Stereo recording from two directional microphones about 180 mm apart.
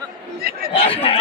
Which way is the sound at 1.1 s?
30° left (ahead or behind).